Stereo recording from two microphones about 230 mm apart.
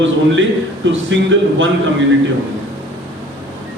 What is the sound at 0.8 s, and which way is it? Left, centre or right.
Speech, right.